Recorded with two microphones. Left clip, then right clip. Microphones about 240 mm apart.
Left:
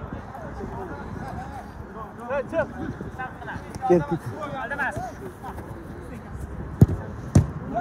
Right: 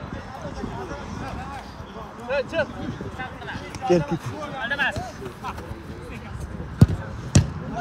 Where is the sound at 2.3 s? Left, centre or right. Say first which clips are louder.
Right 1 dB; right.